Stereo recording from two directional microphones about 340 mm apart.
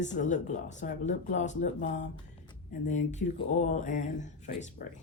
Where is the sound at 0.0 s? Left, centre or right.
Left.